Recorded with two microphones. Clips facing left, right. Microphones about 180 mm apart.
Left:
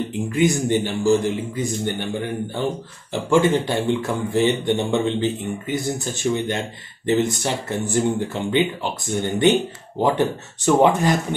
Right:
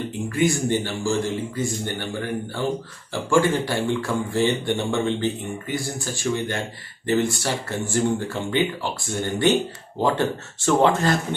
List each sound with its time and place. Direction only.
0.3 s speech: 20° left (ahead or behind)